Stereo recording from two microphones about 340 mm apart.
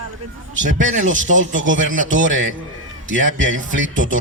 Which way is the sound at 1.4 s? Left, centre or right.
Right.